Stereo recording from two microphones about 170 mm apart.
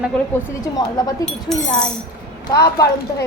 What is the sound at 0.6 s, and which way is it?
Speech, 20° left (ahead or behind).